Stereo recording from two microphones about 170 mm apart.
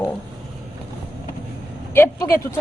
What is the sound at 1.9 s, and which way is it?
Vehicle, 15° left (ahead or behind).